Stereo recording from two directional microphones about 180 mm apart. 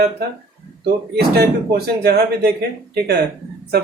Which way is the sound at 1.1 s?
60° right (ahead or behind).